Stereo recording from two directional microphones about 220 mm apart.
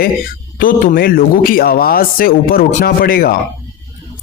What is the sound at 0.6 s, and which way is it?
Speech, 40° left (ahead or behind).